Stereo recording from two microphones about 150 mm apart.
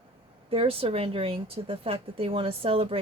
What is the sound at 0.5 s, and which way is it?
A woman's voice, 40° right (ahead or behind).